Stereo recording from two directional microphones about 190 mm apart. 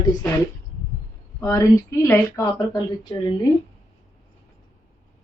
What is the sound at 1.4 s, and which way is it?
Speech, 15° left (ahead or behind).